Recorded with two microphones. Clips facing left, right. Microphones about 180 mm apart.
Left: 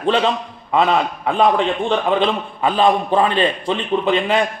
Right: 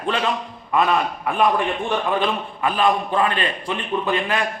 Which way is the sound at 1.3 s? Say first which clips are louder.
Left 4 dB; 20° left (ahead or behind).